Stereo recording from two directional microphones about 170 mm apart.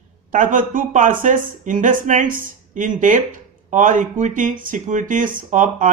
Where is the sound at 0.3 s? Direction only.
50° right (ahead or behind).